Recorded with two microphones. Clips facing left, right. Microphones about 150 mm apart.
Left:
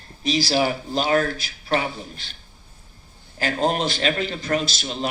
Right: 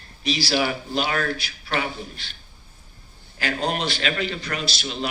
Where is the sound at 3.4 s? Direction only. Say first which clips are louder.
Left 3 dB; 40° left (ahead or behind).